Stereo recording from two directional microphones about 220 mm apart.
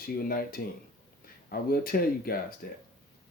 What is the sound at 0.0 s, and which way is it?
Speech, 40° left (ahead or behind).